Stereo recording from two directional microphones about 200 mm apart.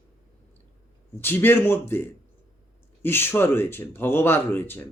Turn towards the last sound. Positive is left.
turn(degrees=10)  # may be behind; listen again after turning